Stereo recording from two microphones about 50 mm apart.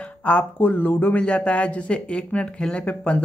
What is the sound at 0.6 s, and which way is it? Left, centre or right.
Speech, left.